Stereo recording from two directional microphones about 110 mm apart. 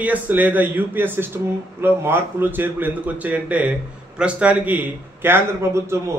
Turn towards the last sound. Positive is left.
turn(degrees=-25)  # may be behind; listen again after turning